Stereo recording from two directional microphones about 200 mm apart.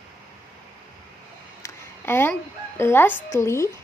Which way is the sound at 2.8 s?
10° left (ahead or behind).